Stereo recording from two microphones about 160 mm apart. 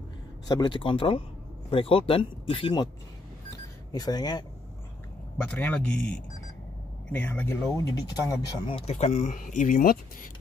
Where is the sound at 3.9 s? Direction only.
25° left (ahead or behind).